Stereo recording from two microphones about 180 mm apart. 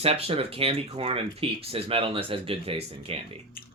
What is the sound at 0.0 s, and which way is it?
Speech, 35° right (ahead or behind).